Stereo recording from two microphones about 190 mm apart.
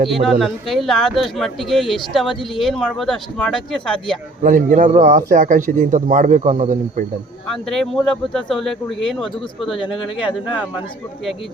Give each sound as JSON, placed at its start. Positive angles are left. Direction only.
{"t": 0.1, "sound": "speech", "side_deg": 0}
{"t": 4.4, "sound": "a man's voice", "side_deg": -45}
{"t": 7.4, "sound": "speech", "side_deg": 0}